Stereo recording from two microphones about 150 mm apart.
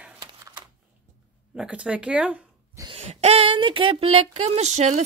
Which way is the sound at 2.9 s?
45° right (ahead or behind).